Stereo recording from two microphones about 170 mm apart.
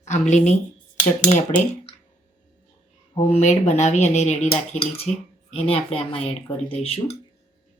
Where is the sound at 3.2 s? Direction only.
45° left (ahead or behind).